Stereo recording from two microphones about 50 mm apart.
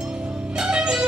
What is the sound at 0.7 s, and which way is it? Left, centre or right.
Music, centre.